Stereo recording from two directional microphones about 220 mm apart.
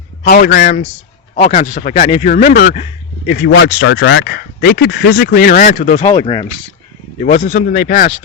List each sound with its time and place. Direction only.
0.3 s speech: 40° left (ahead or behind)
2.7 s a sound: 30° left (ahead or behind)
3.3 s speech: 45° left (ahead or behind)
6.1 s speech: 20° left (ahead or behind)
7.2 s speech: 35° left (ahead or behind)